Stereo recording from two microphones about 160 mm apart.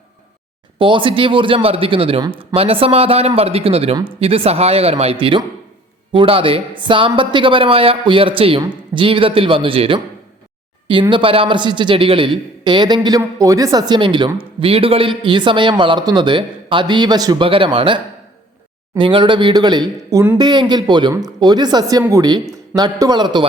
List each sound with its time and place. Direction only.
0.8 s speech: 30° right (ahead or behind)
11.1 s speech: 35° right (ahead or behind)